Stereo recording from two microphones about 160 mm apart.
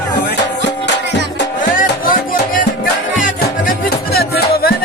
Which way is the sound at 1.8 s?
60° left (ahead or behind).